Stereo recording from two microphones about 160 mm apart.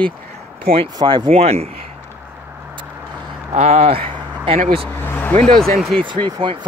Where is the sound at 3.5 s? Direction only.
40° right (ahead or behind).